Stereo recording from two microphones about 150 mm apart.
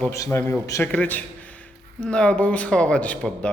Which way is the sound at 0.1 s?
20° left (ahead or behind).